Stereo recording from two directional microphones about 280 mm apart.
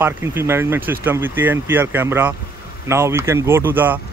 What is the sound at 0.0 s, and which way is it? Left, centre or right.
Speech, centre.